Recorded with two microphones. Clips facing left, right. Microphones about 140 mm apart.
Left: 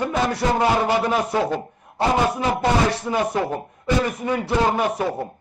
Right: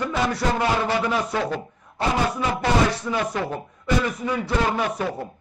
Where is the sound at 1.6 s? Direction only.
55° left (ahead or behind).